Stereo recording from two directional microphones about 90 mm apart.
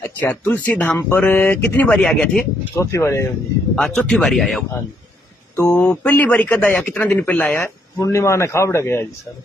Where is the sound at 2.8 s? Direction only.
30° left (ahead or behind).